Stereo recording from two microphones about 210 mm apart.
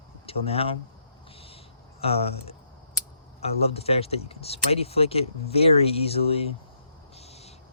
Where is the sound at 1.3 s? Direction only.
25° left (ahead or behind).